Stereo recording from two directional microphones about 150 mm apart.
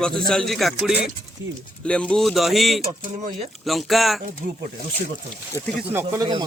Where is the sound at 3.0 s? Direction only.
55° right (ahead or behind).